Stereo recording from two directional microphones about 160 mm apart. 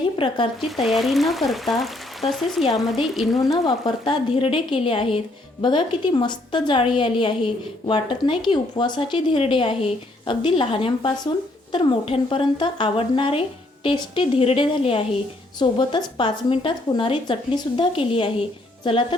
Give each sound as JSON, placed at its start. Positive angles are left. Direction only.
{"t": 0.9, "sound": "speech", "side_deg": 0}
{"t": 3.5, "sound": "a woman's voice", "side_deg": 25}